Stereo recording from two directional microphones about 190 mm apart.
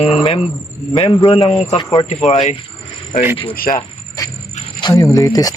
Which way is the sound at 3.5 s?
50° left (ahead or behind).